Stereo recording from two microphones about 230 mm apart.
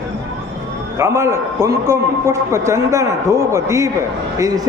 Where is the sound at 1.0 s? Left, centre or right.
Centre.